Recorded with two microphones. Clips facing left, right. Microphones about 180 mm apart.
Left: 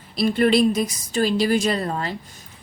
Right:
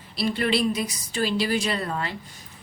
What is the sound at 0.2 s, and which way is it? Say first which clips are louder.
A woman's voice: left 6 dB; 45° left (ahead or behind).